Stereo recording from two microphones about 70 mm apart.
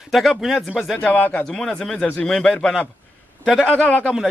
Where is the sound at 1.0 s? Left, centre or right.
Left.